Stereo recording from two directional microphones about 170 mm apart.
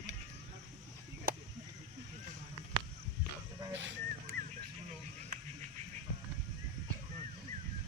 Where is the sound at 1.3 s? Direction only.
55° right (ahead or behind).